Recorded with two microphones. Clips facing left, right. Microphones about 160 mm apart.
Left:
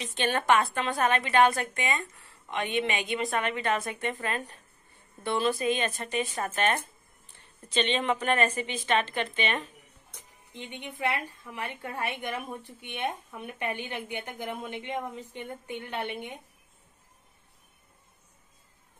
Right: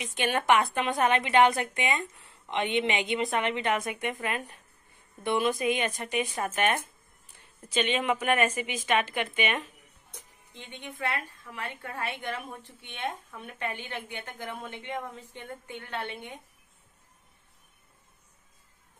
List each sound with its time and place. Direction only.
0.0 s a woman's voice: 10° right (ahead or behind)
10.5 s a woman's voice: 15° left (ahead or behind)